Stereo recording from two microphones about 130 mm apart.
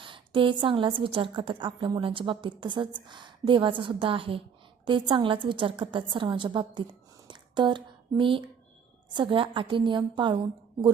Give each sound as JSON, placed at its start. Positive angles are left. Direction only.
{"t": 0.0, "sound": "a woman's voice", "side_deg": -40}
{"t": 7.3, "sound": "a sound", "side_deg": -35}
{"t": 9.1, "sound": "a woman's voice", "side_deg": -40}